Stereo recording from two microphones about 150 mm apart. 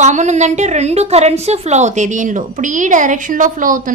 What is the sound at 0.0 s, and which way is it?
A woman's voice, 50° right (ahead or behind).